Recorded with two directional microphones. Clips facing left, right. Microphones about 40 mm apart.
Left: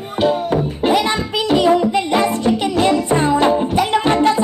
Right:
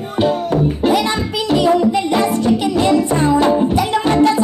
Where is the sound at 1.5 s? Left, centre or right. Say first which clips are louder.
Even; left.